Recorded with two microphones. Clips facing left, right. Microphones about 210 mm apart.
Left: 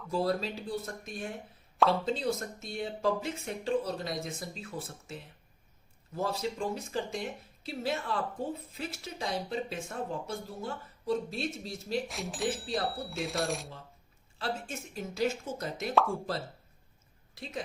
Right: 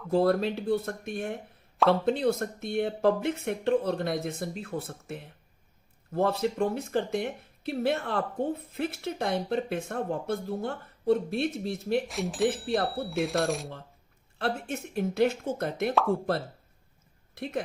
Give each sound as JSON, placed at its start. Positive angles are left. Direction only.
{"t": 0.1, "sound": "speech", "side_deg": -60}
{"t": 12.0, "sound": "speech", "side_deg": 0}
{"t": 12.6, "sound": "speech", "side_deg": -60}
{"t": 12.9, "sound": "speech", "side_deg": 0}
{"t": 14.3, "sound": "speech", "side_deg": -60}
{"t": 17.3, "sound": "speech", "side_deg": -60}